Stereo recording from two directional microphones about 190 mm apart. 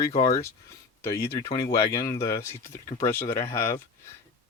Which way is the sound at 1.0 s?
15° left (ahead or behind).